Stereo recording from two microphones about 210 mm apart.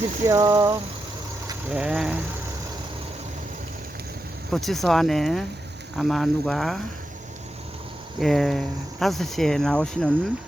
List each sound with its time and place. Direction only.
0.3 s a sound: 15° right (ahead or behind)
1.7 s speech: 5° right (ahead or behind)
4.5 s speech: centre (ahead or behind)
8.2 s speech: centre (ahead or behind)